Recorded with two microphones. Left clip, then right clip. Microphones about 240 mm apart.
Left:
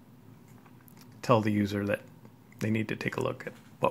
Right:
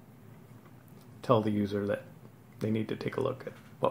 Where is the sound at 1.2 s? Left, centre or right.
Left.